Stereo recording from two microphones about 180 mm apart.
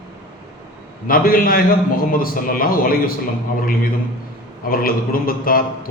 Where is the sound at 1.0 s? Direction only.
55° left (ahead or behind).